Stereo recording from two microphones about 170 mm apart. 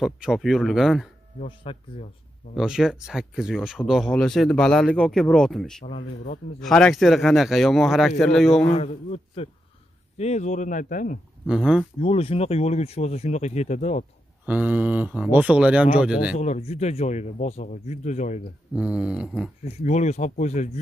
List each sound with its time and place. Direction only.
0.0 s speech: centre (ahead or behind)
1.4 s speech: 35° left (ahead or behind)
2.5 s speech: 5° right (ahead or behind)
5.9 s speech: 45° left (ahead or behind)
6.6 s speech: 5° left (ahead or behind)
8.6 s speech: 40° left (ahead or behind)
11.4 s speech: 5° right (ahead or behind)
12.0 s speech: 35° left (ahead or behind)
14.4 s speech: 10° right (ahead or behind)
16.3 s speech: 40° left (ahead or behind)
18.8 s speech: 5° right (ahead or behind)
19.6 s speech: 45° left (ahead or behind)